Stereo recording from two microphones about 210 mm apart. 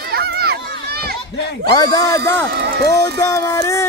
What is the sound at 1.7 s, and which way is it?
Speech, 20° left (ahead or behind).